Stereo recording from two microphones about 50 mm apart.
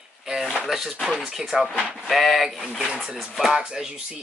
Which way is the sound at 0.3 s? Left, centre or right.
Centre.